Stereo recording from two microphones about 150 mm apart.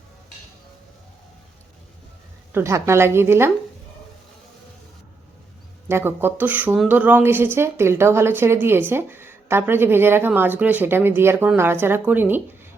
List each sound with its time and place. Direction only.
2.5 s a woman's voice: 15° right (ahead or behind)
5.9 s a woman's voice: 15° right (ahead or behind)